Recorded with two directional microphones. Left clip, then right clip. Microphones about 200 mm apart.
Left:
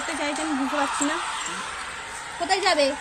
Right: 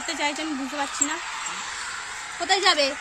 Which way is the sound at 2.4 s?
20° right (ahead or behind).